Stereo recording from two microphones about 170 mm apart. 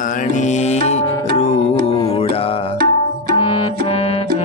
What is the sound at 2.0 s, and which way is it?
Mantra, 35° left (ahead or behind).